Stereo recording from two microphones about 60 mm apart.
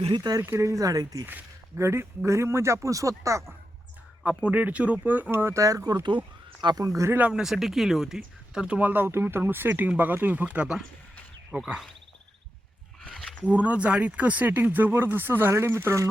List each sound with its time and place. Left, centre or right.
0.2 s speech: right
0.6 s speech: right
1.7 s a man's voice: right
4.2 s speech: centre; by 5.5 s right
5.5 s speech: right
7.3 s speech: centre
8.6 s speech: centre
8.9 s speech: right
13.0 s a sound: centre
13.4 s speech: right